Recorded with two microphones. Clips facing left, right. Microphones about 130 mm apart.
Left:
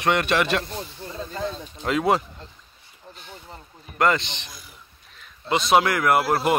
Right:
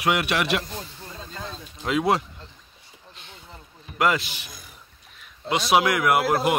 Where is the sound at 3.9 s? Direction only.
5° right (ahead or behind).